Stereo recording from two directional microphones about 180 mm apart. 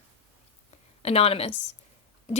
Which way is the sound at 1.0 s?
35° left (ahead or behind).